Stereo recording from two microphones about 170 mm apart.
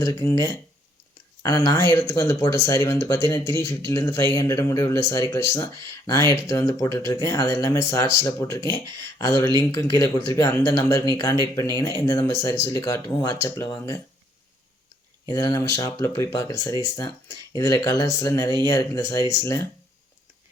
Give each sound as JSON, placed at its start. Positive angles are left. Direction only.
{"t": 0.0, "sound": "speech", "side_deg": 20}
{"t": 15.3, "sound": "speech", "side_deg": 20}